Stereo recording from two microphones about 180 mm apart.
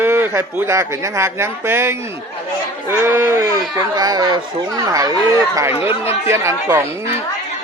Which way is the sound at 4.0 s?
20° right (ahead or behind).